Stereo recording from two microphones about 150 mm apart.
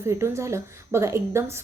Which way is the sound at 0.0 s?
20° right (ahead or behind).